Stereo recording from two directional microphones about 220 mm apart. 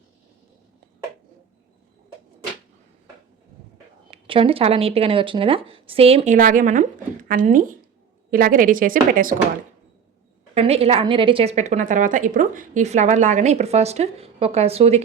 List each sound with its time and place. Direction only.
4.1 s a woman's voice: 25° right (ahead or behind)
10.5 s a woman's voice: 30° right (ahead or behind)